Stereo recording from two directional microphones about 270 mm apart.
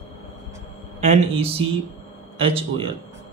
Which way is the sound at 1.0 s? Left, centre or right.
Right.